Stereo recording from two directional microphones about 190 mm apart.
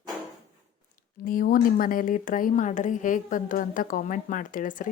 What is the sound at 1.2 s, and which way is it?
Speech, 45° left (ahead or behind).